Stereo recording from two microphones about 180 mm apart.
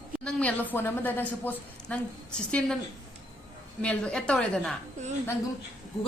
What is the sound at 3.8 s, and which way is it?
Speech, 5° left (ahead or behind).